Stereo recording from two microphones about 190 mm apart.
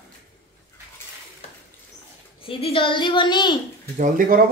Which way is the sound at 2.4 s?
30° left (ahead or behind).